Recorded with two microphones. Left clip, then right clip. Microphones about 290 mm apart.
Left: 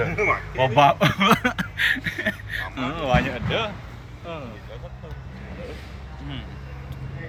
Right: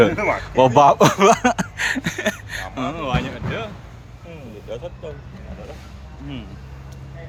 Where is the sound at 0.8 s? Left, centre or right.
Centre.